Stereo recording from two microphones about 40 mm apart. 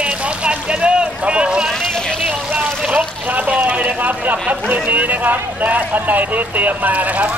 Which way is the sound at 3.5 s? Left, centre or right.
Right.